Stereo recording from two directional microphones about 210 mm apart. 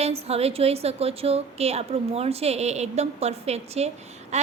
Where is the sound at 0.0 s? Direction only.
30° right (ahead or behind).